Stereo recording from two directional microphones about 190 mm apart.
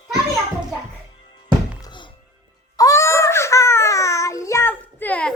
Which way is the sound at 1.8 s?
25° left (ahead or behind).